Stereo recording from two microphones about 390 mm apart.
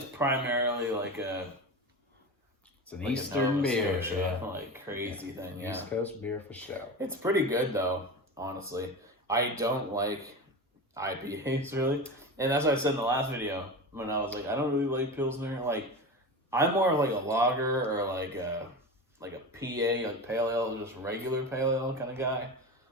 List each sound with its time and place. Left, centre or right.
0.2 s speech: centre
2.8 s speech: centre
6.0 s speech: centre
7.0 s speech: centre